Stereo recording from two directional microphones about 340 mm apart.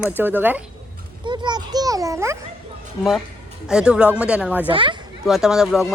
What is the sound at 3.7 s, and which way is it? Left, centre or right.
Speech, centre.